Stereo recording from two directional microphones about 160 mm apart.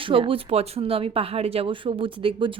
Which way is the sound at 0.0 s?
35° right (ahead or behind).